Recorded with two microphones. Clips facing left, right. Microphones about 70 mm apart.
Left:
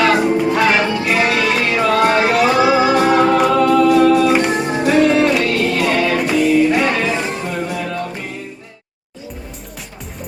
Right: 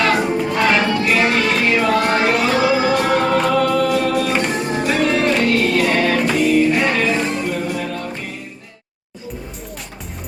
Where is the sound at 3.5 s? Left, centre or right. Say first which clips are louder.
Left 5 dB; left.